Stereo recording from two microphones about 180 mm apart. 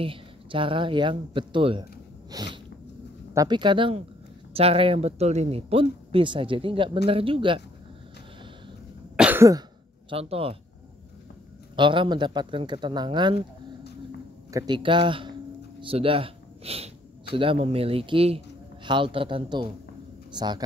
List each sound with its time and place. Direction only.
0.0 s speech: 30° right (ahead or behind)
2.3 s a sound: 25° right (ahead or behind)
3.3 s speech: 25° right (ahead or behind)
9.1 s cough: 10° right (ahead or behind); by 10.6 s 30° right (ahead or behind)
11.7 s speech: 25° right (ahead or behind)
14.5 s speech: 25° right (ahead or behind)